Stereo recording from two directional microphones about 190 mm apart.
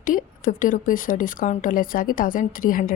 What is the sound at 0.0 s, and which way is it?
A woman's voice, 45° left (ahead or behind).